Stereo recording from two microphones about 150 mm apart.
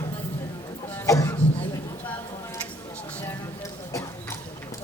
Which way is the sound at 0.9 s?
15° left (ahead or behind).